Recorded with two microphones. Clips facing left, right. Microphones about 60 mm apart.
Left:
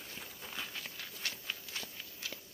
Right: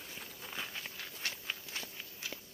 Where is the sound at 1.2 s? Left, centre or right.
Right.